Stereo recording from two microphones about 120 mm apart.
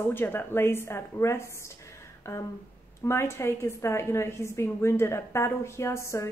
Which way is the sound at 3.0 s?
20° left (ahead or behind).